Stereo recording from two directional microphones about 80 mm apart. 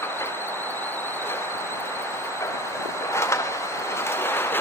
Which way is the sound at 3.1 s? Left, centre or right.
Left.